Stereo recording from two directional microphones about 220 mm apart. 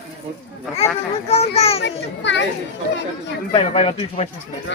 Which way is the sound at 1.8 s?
55° left (ahead or behind).